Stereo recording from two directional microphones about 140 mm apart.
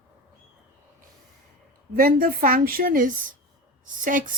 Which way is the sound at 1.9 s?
90° right.